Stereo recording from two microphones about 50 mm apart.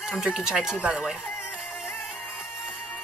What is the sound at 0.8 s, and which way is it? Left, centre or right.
Speech, right.